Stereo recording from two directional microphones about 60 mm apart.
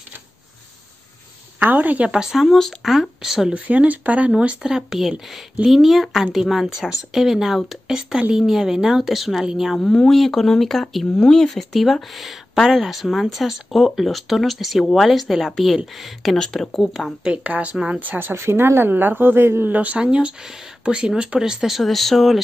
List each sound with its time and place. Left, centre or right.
1.6 s a woman's voice: right
2.1 s speech: centre
3.5 s speech: right
4.7 s speech: centre
9.8 s speech: centre
11.4 s speech: centre
17.2 s speech: centre
18.3 s a woman's voice: right
19.7 s speech: right; by 22.4 s centre